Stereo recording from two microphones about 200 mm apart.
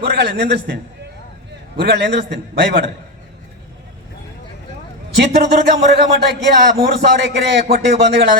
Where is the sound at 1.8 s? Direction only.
55° right (ahead or behind).